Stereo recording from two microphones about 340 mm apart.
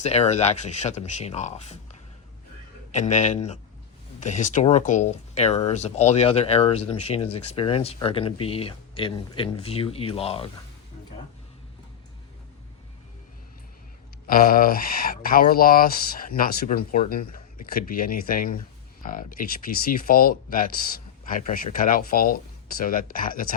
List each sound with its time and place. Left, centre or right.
0.0 s speech: centre
14.3 s speech: left